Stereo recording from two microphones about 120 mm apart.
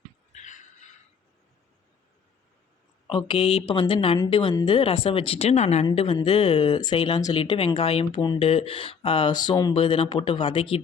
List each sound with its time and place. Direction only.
0.3 s a sound: 85° left
3.1 s speech: 45° left (ahead or behind)
9.7 s speech: 45° left (ahead or behind)